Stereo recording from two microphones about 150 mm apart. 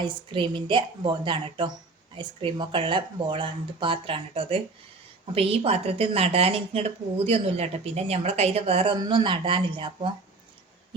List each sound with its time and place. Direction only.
0.0 s a woman's voice: 35° right (ahead or behind)